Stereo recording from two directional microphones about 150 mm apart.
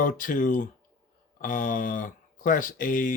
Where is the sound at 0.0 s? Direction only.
65° left (ahead or behind).